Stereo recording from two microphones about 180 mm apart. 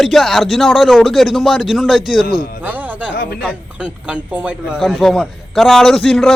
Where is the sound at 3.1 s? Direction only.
60° left (ahead or behind).